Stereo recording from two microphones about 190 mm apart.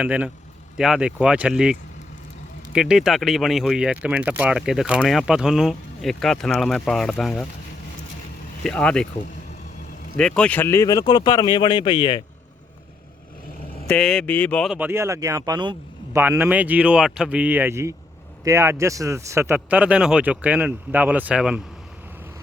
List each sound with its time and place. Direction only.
0.0 s speech: 5° right (ahead or behind)
2.7 s speech: 5° right (ahead or behind)
8.6 s speech: 5° left (ahead or behind)
10.2 s speech: 5° left (ahead or behind); by 12.2 s 25° left (ahead or behind)
13.8 s speech: 5° left (ahead or behind)
14.8 s speech: 10° right (ahead or behind)